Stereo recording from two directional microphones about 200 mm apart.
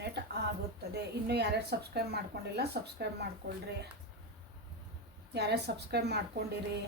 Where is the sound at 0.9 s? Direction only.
55° right (ahead or behind).